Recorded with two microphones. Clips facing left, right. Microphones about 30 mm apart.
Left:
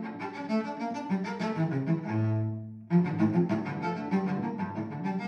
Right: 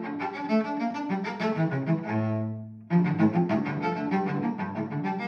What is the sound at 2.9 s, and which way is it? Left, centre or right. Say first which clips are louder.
Music: right 2 dB; centre.